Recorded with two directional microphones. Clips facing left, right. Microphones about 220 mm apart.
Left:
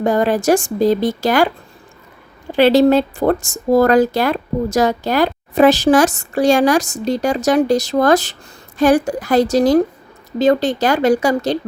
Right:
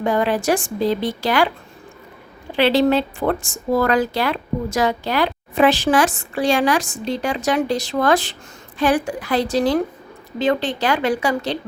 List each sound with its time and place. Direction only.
0.0 s speech: 40° left (ahead or behind)
2.6 s speech: 45° left (ahead or behind)